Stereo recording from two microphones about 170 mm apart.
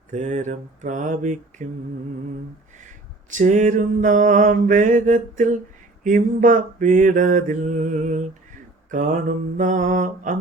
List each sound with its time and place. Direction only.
0.1 s mantra: 45° right (ahead or behind)
3.2 s mantra: 45° right (ahead or behind)